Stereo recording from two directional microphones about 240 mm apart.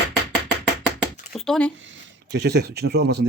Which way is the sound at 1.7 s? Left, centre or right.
Right.